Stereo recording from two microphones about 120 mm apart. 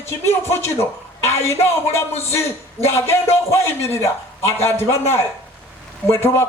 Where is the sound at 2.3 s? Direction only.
20° left (ahead or behind).